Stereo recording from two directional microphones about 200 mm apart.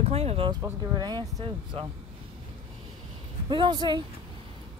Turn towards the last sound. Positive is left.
turn(degrees=-20)  # may be behind; listen again after turning